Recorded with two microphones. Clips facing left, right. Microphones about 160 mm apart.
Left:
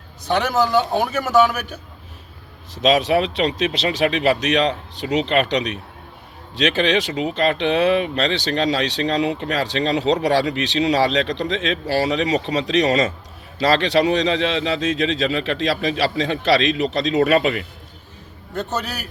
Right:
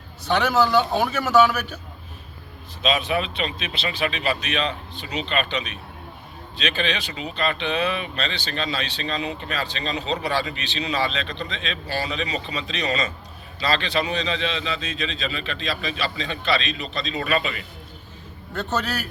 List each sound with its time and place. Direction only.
0.3 s a man's voice: 45° left (ahead or behind)
2.7 s speech: 90° left
13.6 s speech: 80° left
18.7 s a man's voice: 10° left (ahead or behind)